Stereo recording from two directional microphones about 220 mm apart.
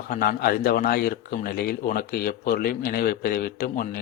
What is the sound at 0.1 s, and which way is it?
Speech, 40° left (ahead or behind).